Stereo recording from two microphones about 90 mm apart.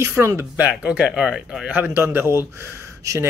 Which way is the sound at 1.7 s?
20° right (ahead or behind).